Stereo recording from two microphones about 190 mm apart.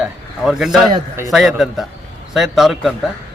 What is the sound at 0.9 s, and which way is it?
Speech, 15° right (ahead or behind).